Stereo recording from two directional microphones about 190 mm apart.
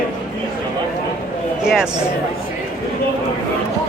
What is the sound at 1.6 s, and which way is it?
Speech, 5° right (ahead or behind).